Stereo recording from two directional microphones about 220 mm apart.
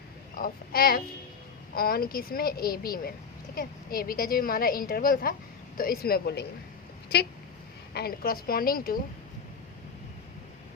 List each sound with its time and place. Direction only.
0.3 s a woman's voice: 40° left (ahead or behind)
7.9 s a woman's voice: 45° left (ahead or behind)